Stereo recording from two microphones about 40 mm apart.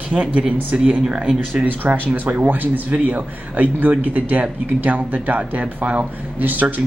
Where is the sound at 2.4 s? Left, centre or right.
Right.